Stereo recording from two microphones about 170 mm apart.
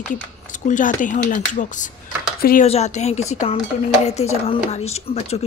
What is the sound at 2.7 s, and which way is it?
Speech, 40° left (ahead or behind).